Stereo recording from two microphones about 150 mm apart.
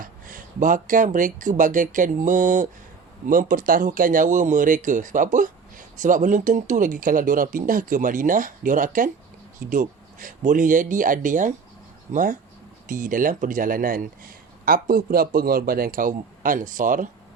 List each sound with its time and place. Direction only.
0.0 s a man's voice: 65° right (ahead or behind)